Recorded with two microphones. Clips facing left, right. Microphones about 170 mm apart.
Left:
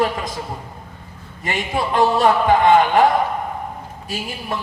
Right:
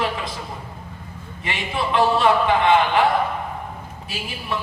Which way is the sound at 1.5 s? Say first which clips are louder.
Left 3 dB; 45° left (ahead or behind).